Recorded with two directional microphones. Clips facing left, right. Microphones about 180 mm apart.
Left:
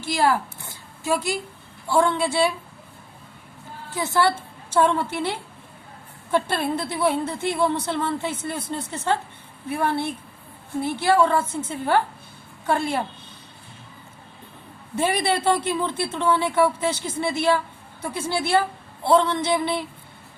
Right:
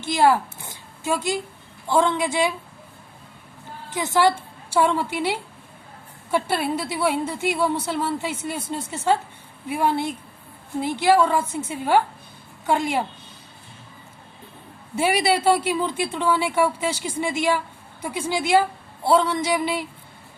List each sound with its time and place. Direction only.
0.0 s a sound: 20° right (ahead or behind)
1.9 s a woman's voice: 20° right (ahead or behind)
3.9 s a woman's voice: 15° right (ahead or behind)
14.9 s a woman's voice: 10° right (ahead or behind)